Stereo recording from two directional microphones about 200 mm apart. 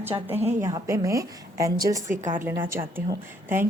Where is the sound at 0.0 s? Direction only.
10° right (ahead or behind).